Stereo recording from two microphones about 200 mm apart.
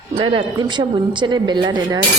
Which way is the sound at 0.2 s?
25° right (ahead or behind).